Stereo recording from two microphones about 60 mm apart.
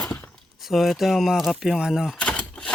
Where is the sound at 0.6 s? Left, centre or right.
Centre.